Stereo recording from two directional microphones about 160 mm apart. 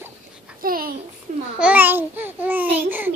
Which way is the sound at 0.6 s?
65° right (ahead or behind).